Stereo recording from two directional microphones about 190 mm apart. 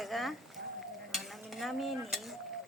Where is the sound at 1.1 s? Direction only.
Centre (ahead or behind).